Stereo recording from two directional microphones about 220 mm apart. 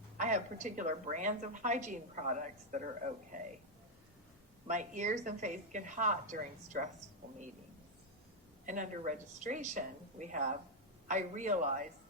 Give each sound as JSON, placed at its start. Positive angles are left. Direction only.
{"t": 0.2, "sound": "a woman's voice", "side_deg": -35}
{"t": 4.6, "sound": "a woman's voice", "side_deg": -35}
{"t": 8.6, "sound": "a woman's voice", "side_deg": -35}